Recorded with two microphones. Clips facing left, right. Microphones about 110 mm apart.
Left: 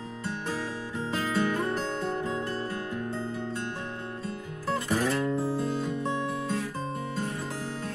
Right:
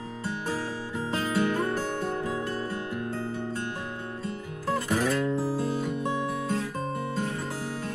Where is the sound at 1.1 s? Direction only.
15° right (ahead or behind).